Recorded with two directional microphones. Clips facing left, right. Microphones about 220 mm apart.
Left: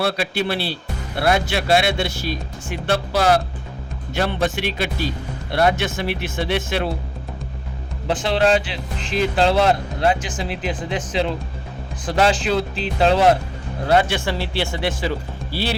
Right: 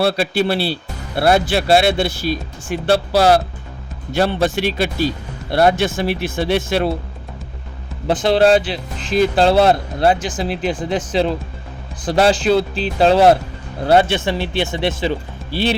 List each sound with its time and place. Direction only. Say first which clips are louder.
0.0 s speech: right 5 dB; 30° right (ahead or behind)
8.0 s a man's voice: right 5 dB; 40° right (ahead or behind)